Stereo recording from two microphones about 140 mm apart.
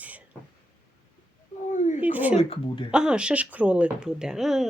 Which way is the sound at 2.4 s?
40° left (ahead or behind).